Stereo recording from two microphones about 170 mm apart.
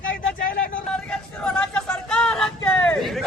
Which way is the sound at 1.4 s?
5° left (ahead or behind).